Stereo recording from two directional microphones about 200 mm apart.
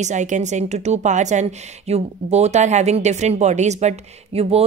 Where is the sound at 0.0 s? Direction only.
35° right (ahead or behind).